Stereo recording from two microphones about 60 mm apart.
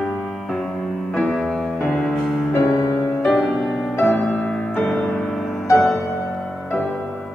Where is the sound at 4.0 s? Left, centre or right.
Left.